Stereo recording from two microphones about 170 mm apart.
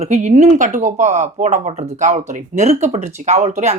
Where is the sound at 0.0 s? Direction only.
40° right (ahead or behind).